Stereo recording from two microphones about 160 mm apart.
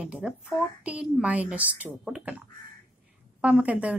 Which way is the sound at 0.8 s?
10° right (ahead or behind).